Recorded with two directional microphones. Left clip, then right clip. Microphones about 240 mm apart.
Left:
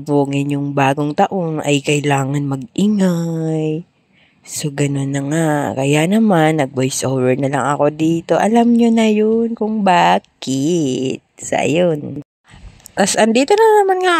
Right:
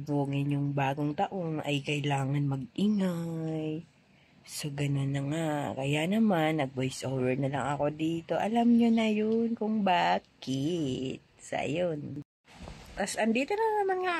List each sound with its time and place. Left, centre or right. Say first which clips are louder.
0.0 s speech: left 16 dB; left